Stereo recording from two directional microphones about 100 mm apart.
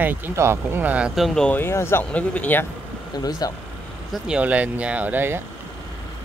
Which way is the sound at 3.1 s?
40° left (ahead or behind).